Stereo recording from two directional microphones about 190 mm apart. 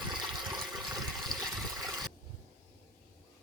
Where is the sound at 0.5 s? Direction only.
Centre (ahead or behind).